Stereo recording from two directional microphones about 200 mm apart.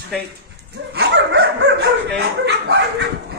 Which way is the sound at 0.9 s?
55° right (ahead or behind).